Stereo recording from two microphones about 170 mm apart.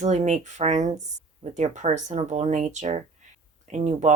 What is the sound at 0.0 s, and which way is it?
Speech, 45° right (ahead or behind).